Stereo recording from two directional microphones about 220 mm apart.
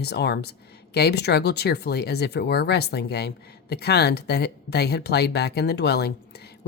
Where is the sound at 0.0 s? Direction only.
50° left (ahead or behind).